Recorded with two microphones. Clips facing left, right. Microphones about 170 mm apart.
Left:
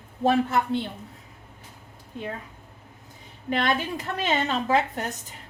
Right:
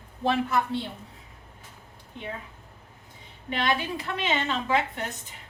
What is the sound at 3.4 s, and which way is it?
A woman's voice, 45° left (ahead or behind).